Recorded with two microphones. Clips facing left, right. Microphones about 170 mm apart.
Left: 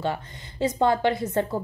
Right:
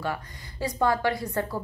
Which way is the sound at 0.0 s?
25° left (ahead or behind).